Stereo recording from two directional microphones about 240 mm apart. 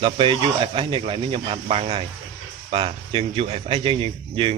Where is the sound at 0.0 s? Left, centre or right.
Right.